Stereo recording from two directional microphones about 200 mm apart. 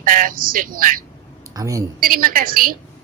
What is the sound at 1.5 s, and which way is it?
Speech, 15° right (ahead or behind).